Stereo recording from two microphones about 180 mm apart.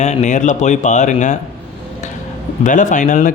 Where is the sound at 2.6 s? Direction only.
45° left (ahead or behind).